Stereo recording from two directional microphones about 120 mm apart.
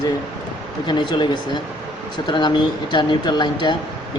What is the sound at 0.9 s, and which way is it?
A man's voice, 40° left (ahead or behind).